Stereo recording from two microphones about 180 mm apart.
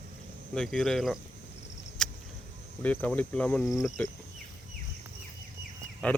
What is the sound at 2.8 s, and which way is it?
Speech, 10° left (ahead or behind).